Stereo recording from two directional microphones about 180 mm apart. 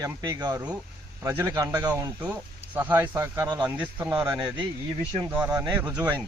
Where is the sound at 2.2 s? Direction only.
10° right (ahead or behind).